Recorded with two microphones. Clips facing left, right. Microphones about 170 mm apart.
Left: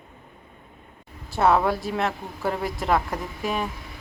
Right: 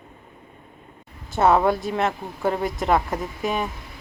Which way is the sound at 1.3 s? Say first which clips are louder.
Right 2 dB; centre (ahead or behind).